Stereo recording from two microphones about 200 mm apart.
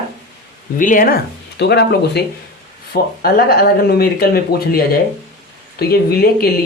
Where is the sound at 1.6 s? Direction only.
55° left (ahead or behind).